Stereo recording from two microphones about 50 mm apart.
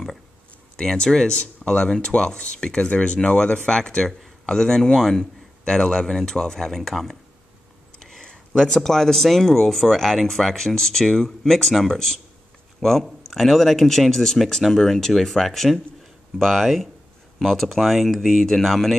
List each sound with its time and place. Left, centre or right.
0.7 s speech: centre
8.0 s speech: centre